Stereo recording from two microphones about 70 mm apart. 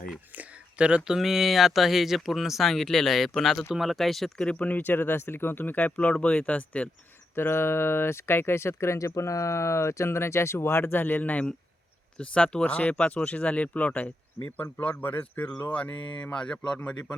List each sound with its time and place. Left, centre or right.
0.3 s speech: centre
4.4 s speech: centre
7.3 s speech: left; by 17.1 s centre